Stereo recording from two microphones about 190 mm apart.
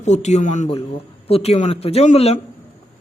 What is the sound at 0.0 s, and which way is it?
Speech, 35° left (ahead or behind).